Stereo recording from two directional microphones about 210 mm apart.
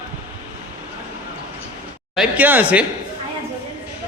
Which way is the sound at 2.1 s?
5° right (ahead or behind).